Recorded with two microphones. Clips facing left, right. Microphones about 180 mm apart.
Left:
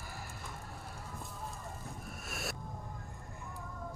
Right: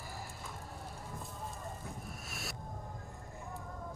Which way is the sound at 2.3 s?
55° left (ahead or behind).